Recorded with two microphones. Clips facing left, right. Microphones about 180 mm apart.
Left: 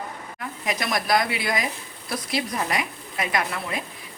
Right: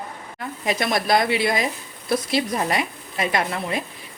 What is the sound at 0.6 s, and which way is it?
A woman's voice, 30° right (ahead or behind).